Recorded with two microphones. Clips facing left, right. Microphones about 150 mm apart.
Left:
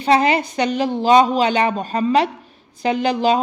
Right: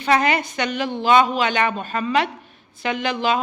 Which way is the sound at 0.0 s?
30° left (ahead or behind).